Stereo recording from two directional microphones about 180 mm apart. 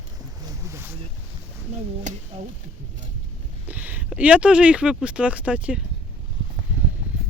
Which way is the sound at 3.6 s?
10° right (ahead or behind).